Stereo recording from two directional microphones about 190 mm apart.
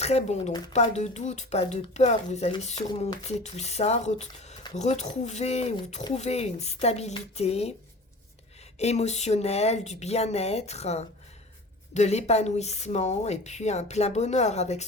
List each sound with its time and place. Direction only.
0.0 s speech: 35° left (ahead or behind)
8.8 s speech: 35° left (ahead or behind)